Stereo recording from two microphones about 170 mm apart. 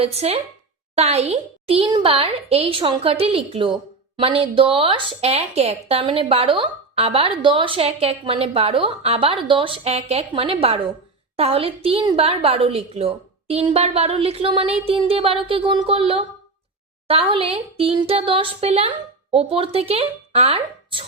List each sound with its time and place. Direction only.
0.0 s a woman's voice: 35° right (ahead or behind)